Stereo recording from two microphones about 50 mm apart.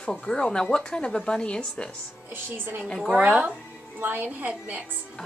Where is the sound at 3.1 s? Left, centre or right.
Right.